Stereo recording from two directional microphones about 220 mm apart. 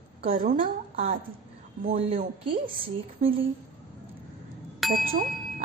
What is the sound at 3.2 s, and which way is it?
Speech, 35° right (ahead or behind).